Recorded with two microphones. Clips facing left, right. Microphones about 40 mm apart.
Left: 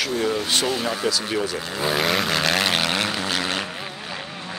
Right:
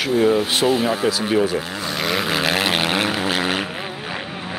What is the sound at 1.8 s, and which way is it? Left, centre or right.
Vehicle, centre.